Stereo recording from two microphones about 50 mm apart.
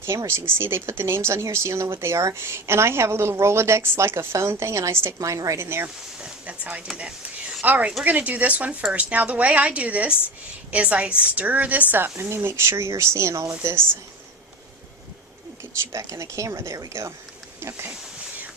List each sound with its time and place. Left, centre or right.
0.0 s speech: right
5.2 s a woman's voice: right
5.6 s speech: right
6.4 s a woman's voice: right
7.6 s a woman's voice: right
12.2 s speech: right
15.8 s speech: right
17.6 s speech: right